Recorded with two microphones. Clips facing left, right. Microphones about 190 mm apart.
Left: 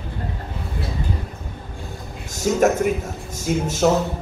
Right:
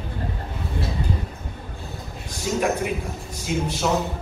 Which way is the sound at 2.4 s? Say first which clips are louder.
Left 6 dB; 45° left (ahead or behind).